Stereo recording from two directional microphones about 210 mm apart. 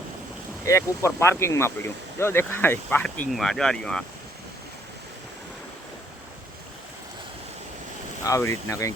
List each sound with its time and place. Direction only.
0.6 s speech: 15° left (ahead or behind)
8.3 s speech: 15° left (ahead or behind)